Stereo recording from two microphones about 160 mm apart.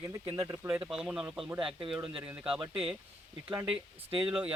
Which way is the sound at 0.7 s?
5° right (ahead or behind).